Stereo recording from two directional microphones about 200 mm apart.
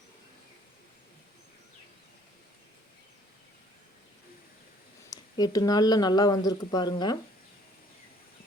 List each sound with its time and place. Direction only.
5.1 s speech: 20° left (ahead or behind)